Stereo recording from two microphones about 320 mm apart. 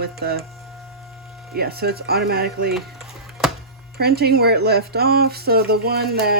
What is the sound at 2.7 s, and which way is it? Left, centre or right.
Music, centre.